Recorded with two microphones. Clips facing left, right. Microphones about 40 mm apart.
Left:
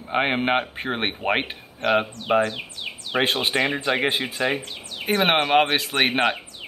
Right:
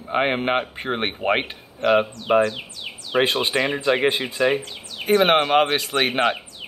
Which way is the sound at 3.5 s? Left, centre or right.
Centre.